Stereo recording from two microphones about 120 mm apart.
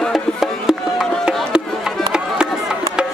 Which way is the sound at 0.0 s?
Centre (ahead or behind).